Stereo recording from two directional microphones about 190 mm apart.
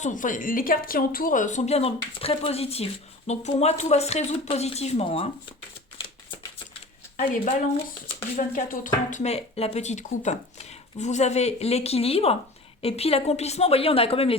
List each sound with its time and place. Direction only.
0.0 s speech: 40° left (ahead or behind)
8.4 s speech: 45° left (ahead or behind)